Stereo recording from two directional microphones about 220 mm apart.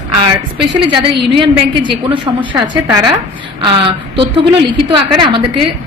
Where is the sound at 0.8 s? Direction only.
20° right (ahead or behind).